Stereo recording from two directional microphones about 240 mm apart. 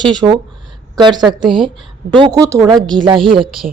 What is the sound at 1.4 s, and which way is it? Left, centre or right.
A woman's voice, right.